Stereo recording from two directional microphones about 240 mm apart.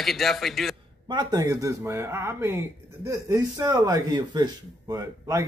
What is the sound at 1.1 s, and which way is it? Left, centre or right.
Speech, centre.